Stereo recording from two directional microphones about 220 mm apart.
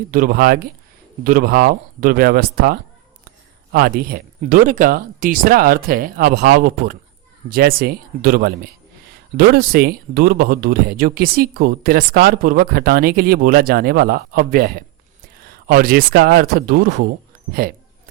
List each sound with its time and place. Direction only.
0.1 s speech: 40° right (ahead or behind)